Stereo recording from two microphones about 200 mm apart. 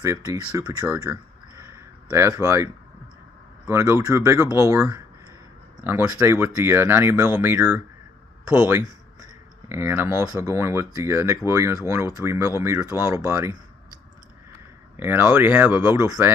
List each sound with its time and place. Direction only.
0.0 s speech: 15° right (ahead or behind)
5.9 s speech: 10° right (ahead or behind)
15.0 s speech: 10° right (ahead or behind)